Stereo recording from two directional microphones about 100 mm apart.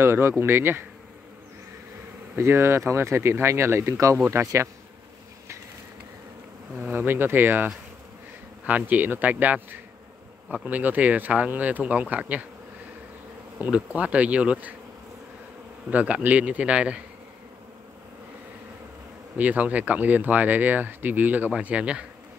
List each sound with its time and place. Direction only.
0.0 s speech: 25° right (ahead or behind)
2.3 s speech: 25° right (ahead or behind)
6.8 s speech: 20° right (ahead or behind)
13.6 s speech: 15° right (ahead or behind)
15.9 s speech: 15° right (ahead or behind)
19.3 s speech: 15° right (ahead or behind)